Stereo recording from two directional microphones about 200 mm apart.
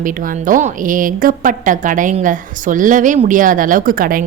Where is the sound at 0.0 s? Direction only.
40° right (ahead or behind).